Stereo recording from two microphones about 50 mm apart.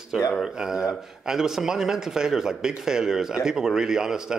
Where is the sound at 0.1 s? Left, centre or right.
Centre.